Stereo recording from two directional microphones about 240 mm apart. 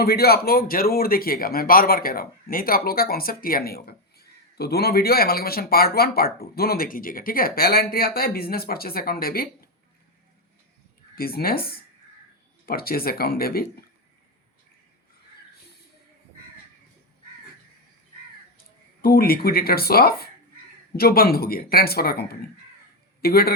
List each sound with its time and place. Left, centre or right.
0.0 s speech: left
11.1 s speech: left
19.0 s speech: left